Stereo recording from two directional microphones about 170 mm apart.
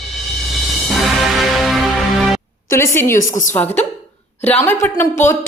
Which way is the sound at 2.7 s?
15° left (ahead or behind).